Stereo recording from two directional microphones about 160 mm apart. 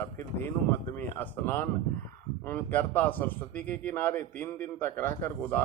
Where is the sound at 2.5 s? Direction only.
10° left (ahead or behind).